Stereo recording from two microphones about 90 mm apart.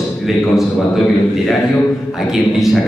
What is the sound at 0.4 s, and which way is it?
A man's voice, centre (ahead or behind).